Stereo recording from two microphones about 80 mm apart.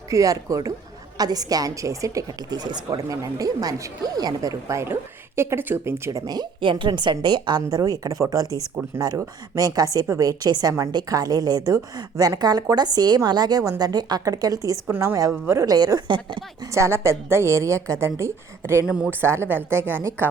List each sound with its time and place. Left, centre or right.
0.1 s a woman's voice: right
2.6 s speech: right
3.1 s a woman's voice: right
4.7 s a woman's voice: right
6.1 s a woman's voice: right
6.6 s a woman's voice: right
15.6 s speech: right
16.7 s a woman's voice: right
18.9 s a woman's voice: centre
19.2 s a woman's voice: right